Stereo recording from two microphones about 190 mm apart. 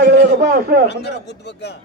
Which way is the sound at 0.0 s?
60° right (ahead or behind).